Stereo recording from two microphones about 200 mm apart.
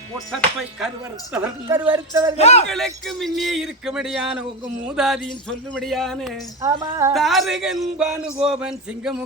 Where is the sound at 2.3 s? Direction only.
30° left (ahead or behind).